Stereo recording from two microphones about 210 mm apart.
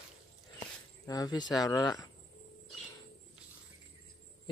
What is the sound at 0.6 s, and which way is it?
Speech, 15° left (ahead or behind).